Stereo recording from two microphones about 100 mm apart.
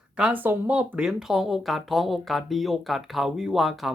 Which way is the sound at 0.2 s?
15° right (ahead or behind).